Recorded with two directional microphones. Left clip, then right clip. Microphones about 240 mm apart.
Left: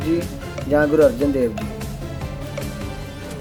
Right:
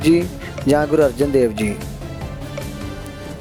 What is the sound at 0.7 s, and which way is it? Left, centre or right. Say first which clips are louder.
Speech: even; right.